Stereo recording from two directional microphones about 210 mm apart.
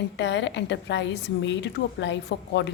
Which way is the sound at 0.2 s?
60° left (ahead or behind).